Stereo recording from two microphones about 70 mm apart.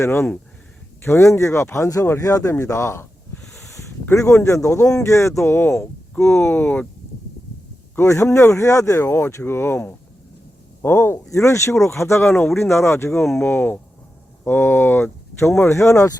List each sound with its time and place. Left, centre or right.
0.0 s speech: left
3.4 s a sound: centre
4.1 s speech: left
7.9 s speech: left
10.8 s speech: left